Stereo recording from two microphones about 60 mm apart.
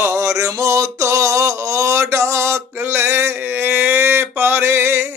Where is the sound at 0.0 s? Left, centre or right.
Right.